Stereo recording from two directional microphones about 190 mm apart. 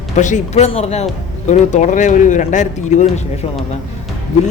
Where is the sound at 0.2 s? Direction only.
40° left (ahead or behind).